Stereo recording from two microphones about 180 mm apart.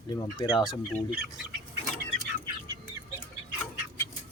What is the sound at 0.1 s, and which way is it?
Speech, 20° left (ahead or behind).